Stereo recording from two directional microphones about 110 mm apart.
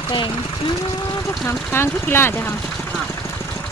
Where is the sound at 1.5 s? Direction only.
20° left (ahead or behind).